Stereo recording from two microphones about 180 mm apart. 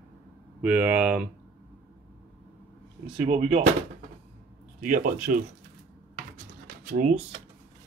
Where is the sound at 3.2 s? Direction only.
40° right (ahead or behind).